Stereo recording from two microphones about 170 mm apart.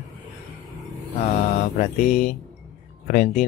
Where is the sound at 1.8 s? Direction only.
50° left (ahead or behind).